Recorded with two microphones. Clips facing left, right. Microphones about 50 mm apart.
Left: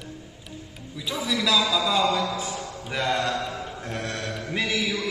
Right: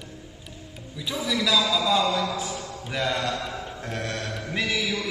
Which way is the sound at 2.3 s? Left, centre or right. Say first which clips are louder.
Even; centre.